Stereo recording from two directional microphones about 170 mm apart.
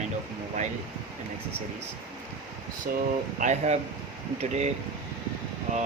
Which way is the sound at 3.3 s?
45° right (ahead or behind).